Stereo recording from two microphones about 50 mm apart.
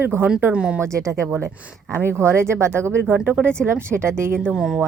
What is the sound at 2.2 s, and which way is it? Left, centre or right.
Speech, right.